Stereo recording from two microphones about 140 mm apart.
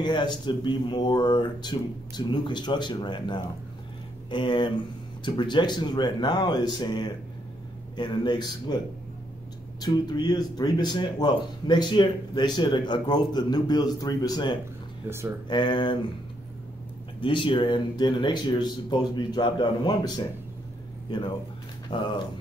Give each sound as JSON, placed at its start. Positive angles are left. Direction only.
{"t": 0.0, "sound": "speech", "side_deg": 30}
{"t": 9.8, "sound": "speech", "side_deg": 30}
{"t": 15.0, "sound": "speech", "side_deg": -20}
{"t": 15.4, "sound": "speech", "side_deg": 30}
{"t": 17.2, "sound": "speech", "side_deg": 35}